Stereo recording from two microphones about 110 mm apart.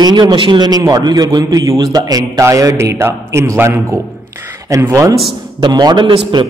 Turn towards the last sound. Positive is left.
turn(degrees=-50)  # may be behind; listen again after turning